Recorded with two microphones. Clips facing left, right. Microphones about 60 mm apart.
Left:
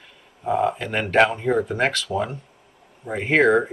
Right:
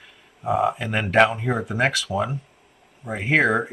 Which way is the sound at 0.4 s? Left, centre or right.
Centre.